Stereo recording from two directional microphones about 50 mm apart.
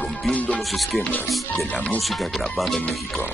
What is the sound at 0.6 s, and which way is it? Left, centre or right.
Music, centre.